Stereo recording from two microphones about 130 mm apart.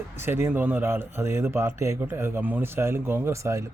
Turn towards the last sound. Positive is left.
turn(degrees=-20)  # may be behind; listen again after turning